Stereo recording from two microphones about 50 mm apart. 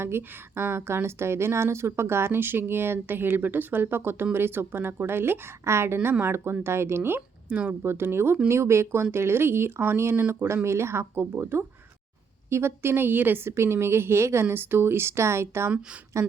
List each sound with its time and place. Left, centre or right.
0.0 s speech: right
5.6 s speech: right
8.4 s speech: right
10.5 s speech: right
11.1 s speech: right
12.5 s speech: right
13.6 s speech: right
14.4 s speech: right
16.1 s speech: right